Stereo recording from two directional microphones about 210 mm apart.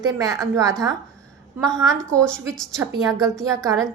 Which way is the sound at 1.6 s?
Centre (ahead or behind).